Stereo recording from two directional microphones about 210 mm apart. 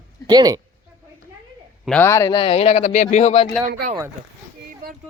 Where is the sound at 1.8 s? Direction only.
10° left (ahead or behind); by 3.4 s 30° left (ahead or behind).